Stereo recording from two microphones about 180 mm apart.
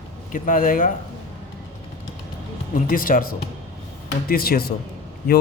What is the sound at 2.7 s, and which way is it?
A man's voice, 50° left (ahead or behind).